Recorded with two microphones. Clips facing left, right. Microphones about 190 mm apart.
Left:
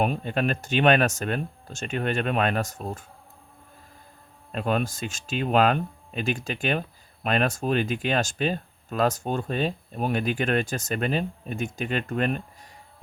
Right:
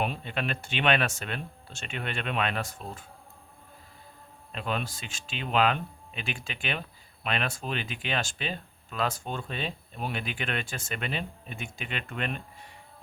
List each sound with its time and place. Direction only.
0.0 s speech: 45° left (ahead or behind)
4.5 s speech: 45° left (ahead or behind)